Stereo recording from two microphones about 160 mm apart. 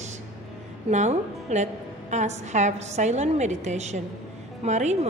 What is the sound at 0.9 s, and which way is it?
A woman's voice, 45° right (ahead or behind).